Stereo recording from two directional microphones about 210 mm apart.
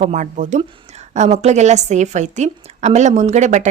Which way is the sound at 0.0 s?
35° right (ahead or behind).